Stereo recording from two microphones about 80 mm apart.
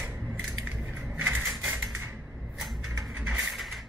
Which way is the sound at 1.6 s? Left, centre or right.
Right.